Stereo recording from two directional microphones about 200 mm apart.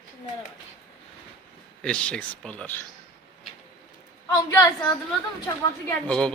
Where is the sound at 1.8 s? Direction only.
5° left (ahead or behind).